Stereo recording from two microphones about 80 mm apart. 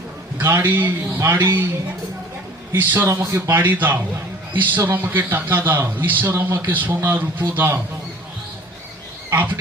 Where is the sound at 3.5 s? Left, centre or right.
Right.